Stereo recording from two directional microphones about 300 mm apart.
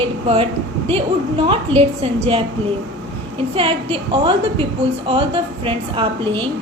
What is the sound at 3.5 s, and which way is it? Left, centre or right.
A woman's voice, centre.